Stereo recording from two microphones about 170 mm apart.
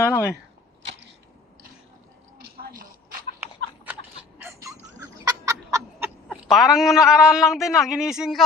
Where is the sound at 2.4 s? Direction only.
55° right (ahead or behind).